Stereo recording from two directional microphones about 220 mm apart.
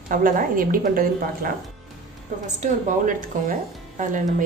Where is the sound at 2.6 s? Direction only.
35° right (ahead or behind).